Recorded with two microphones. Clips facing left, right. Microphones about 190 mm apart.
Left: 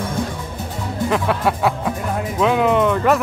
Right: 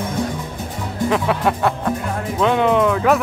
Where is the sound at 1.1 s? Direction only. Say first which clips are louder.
Right 1 dB; centre (ahead or behind).